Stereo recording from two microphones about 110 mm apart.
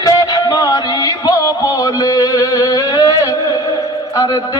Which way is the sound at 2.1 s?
35° left (ahead or behind).